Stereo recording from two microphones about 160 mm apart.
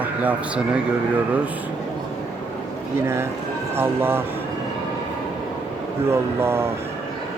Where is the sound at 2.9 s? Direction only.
15° right (ahead or behind).